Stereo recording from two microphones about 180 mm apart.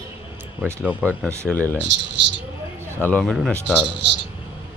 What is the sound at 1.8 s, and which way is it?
Speech, 85° right.